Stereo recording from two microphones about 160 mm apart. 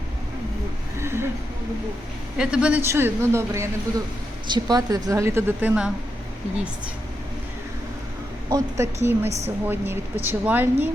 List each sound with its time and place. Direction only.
0.9 s a sound: 15° right (ahead or behind)
2.4 s a woman's voice: 5° right (ahead or behind)
8.4 s a woman's voice: 20° right (ahead or behind)